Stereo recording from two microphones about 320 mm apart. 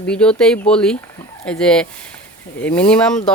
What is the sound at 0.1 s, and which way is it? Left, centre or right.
Speech, centre.